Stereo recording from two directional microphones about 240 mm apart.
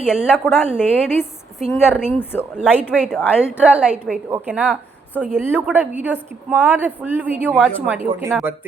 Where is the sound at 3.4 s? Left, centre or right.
Centre.